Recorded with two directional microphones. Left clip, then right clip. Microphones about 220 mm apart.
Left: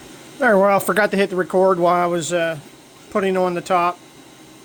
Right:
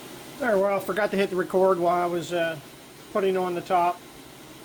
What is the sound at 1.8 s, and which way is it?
Speech, 40° left (ahead or behind).